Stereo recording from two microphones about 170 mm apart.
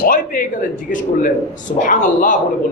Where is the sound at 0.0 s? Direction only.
55° left (ahead or behind).